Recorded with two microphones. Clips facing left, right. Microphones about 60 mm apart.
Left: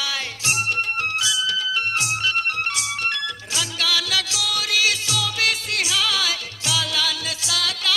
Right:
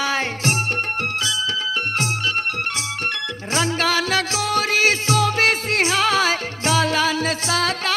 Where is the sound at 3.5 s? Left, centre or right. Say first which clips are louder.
Right 6 dB; right.